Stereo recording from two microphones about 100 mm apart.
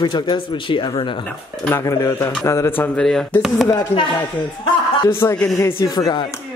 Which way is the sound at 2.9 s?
5° left (ahead or behind).